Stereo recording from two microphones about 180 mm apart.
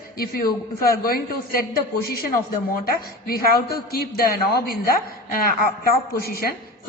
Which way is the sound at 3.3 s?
55° left (ahead or behind).